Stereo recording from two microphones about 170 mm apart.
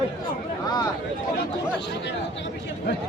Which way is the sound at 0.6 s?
25° left (ahead or behind).